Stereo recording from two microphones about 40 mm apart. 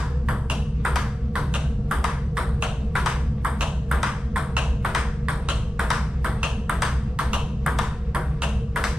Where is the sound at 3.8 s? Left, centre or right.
Centre.